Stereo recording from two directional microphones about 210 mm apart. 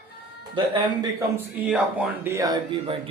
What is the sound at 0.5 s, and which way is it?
Speech, 20° right (ahead or behind).